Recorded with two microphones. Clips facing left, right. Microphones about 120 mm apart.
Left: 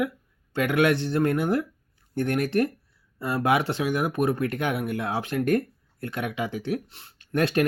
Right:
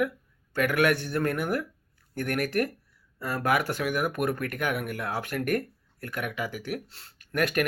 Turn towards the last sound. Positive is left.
turn(degrees=30)  # may be behind; listen again after turning